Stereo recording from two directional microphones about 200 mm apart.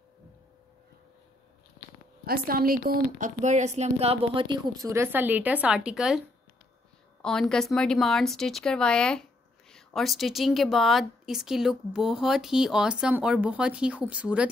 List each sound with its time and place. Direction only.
2.2 s a woman's voice: 45° right (ahead or behind); by 14.5 s 5° right (ahead or behind)